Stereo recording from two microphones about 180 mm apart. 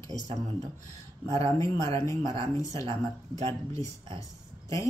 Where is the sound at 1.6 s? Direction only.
20° left (ahead or behind).